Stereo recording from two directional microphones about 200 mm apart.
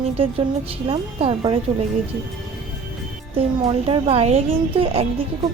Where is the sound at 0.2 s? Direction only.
30° right (ahead or behind).